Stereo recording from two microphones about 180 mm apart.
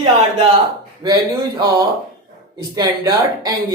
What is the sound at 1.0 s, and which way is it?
Speech, 20° right (ahead or behind).